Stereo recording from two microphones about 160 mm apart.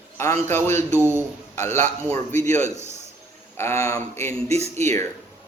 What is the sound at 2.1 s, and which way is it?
A man's voice, 20° left (ahead or behind).